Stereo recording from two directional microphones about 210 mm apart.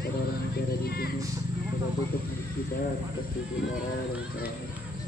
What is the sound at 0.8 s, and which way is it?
Vehicle, 45° left (ahead or behind).